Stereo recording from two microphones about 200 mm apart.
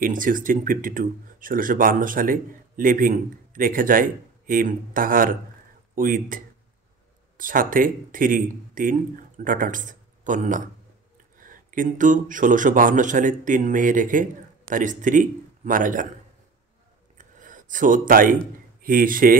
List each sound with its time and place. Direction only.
0.0 s speech: 40° right (ahead or behind)
17.2 s a sound: 40° right (ahead or behind)
18.8 s speech: 45° right (ahead or behind)